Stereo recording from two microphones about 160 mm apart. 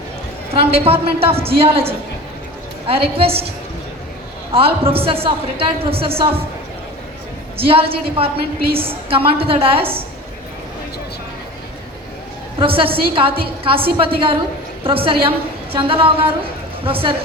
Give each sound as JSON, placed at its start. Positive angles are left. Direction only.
{"t": 0.5, "sound": "a woman's voice", "side_deg": -35}
{"t": 4.5, "sound": "a woman's voice", "side_deg": -35}
{"t": 7.5, "sound": "a woman's voice", "side_deg": -35}
{"t": 12.5, "sound": "a woman's voice", "side_deg": -35}